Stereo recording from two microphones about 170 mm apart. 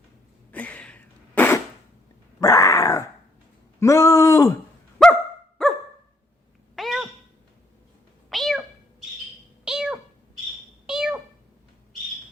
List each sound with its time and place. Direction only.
0.5 s a sound: 10° left (ahead or behind)
2.4 s grunt: 20° left (ahead or behind)
3.8 s speech: 20° left (ahead or behind)
5.6 s dog: 5° left (ahead or behind)
6.7 s cat: centre (ahead or behind)
8.3 s bird: centre (ahead or behind)
9.6 s cat: 5° right (ahead or behind)